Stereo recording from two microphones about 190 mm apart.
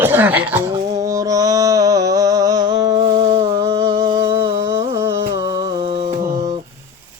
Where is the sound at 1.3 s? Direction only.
20° right (ahead or behind).